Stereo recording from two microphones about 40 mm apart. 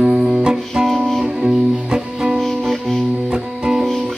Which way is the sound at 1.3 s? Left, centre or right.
Centre.